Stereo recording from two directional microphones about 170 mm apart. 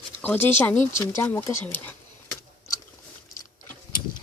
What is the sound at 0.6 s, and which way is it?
Speech, 10° left (ahead or behind).